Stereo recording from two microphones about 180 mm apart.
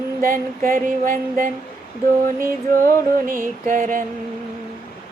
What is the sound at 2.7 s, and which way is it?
Music, 55° right (ahead or behind).